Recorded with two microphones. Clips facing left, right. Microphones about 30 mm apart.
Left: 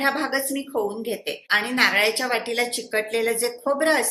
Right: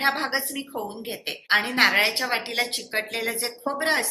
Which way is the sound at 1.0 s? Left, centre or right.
Right.